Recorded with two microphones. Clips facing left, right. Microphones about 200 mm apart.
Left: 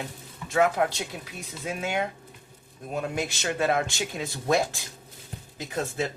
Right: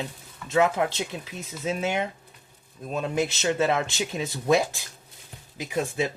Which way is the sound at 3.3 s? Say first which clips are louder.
Right 2 dB; 20° right (ahead or behind).